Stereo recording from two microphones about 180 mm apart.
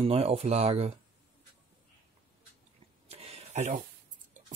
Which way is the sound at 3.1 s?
35° right (ahead or behind).